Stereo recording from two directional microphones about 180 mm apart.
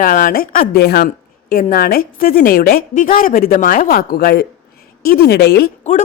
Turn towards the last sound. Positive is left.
turn(degrees=50)  # may be behind; listen again after turning